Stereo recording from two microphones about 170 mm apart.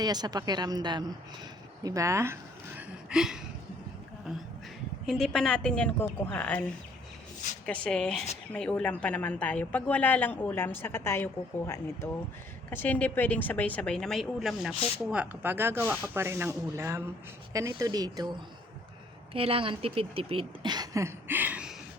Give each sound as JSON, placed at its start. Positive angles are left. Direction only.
{"t": 0.0, "sound": "a woman's voice", "side_deg": -25}
{"t": 3.1, "sound": "a sound", "side_deg": -5}
{"t": 5.0, "sound": "a woman's voice", "side_deg": 0}
{"t": 19.3, "sound": "speech", "side_deg": -35}